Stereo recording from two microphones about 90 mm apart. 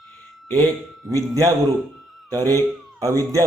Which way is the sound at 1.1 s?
40° right (ahead or behind).